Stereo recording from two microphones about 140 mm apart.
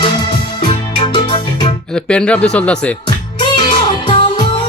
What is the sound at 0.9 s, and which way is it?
Music, 35° left (ahead or behind).